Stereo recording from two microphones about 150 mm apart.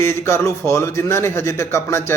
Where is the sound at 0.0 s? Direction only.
15° left (ahead or behind).